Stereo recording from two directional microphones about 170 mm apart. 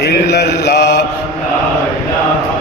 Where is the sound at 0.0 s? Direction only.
75° left (ahead or behind).